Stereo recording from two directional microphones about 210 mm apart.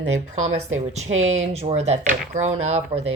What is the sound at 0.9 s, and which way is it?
Speech, 30° right (ahead or behind).